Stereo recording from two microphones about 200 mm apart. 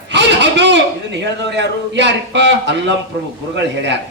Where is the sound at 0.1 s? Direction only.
60° right (ahead or behind).